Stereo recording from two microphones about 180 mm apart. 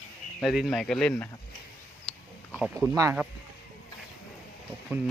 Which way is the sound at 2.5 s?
10° right (ahead or behind).